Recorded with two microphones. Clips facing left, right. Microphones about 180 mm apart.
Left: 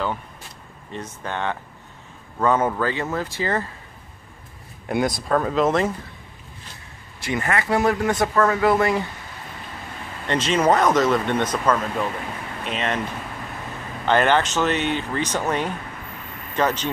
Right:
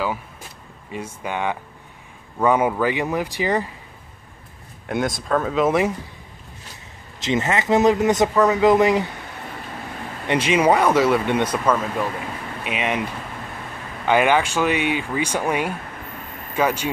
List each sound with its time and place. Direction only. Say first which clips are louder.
0.9 s speech: right 2 dB; 10° right (ahead or behind)
4.8 s speech: left 1 dB; centre (ahead or behind)
7.2 s speech: right 3 dB; 20° right (ahead or behind)
10.2 s speech: right 2 dB; 10° right (ahead or behind)
14.0 s speech: right 1 dB; 10° right (ahead or behind)